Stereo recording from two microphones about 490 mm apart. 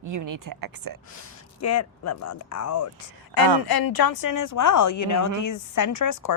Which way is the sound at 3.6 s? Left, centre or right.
Left.